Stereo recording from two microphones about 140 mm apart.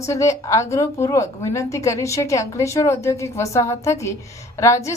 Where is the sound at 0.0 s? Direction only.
20° left (ahead or behind).